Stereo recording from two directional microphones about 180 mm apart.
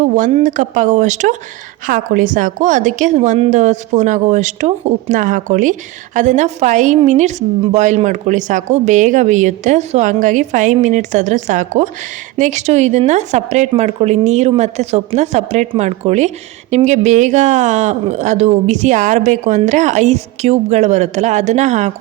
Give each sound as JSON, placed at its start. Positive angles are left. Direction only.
{"t": 0.0, "sound": "a woman's voice", "side_deg": -40}